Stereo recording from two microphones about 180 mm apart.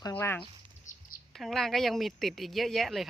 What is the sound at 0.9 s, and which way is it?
Chirp, 45° left (ahead or behind).